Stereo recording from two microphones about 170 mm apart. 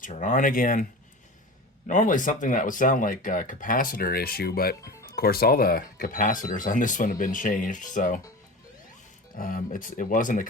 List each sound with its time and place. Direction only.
0.0 s speech: 45° left (ahead or behind)
1.9 s speech: 50° left (ahead or behind)
4.8 s music: 20° left (ahead or behind)
5.0 s speech: 60° left (ahead or behind)
9.3 s speech: 55° left (ahead or behind)